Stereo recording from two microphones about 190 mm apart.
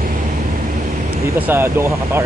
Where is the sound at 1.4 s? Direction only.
10° right (ahead or behind).